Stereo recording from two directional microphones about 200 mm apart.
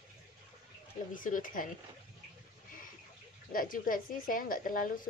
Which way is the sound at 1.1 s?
40° left (ahead or behind).